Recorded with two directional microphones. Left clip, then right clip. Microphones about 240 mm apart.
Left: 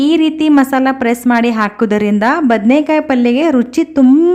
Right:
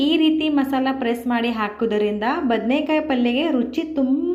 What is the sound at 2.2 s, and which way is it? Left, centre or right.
Speech, left.